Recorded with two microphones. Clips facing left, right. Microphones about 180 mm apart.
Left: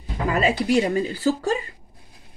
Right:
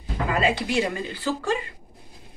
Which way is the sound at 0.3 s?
40° left (ahead or behind).